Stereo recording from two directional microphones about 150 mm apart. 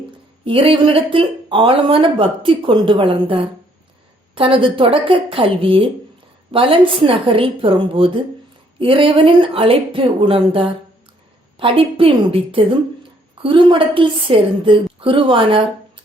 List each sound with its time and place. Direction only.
0.4 s speech: 35° right (ahead or behind)